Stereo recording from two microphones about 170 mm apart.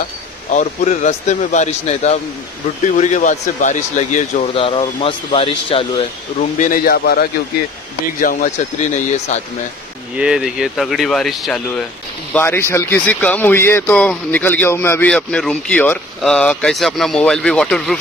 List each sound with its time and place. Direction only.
0.5 s speech: 45° left (ahead or behind)
4.6 s speech: 30° left (ahead or behind)
6.6 s speech: 55° left (ahead or behind)
10.1 s speech: 5° right (ahead or behind)
12.4 s speech: 15° left (ahead or behind)